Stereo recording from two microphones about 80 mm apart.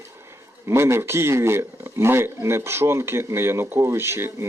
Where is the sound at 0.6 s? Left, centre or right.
Right.